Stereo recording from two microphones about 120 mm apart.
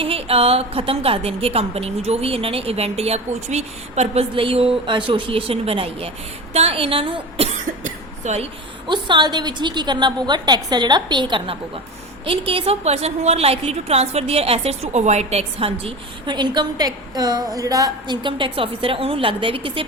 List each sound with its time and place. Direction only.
0.0 s a woman's voice: 55° right (ahead or behind)
7.9 s a sound: 75° right (ahead or behind)
8.9 s a woman's voice: 40° right (ahead or behind)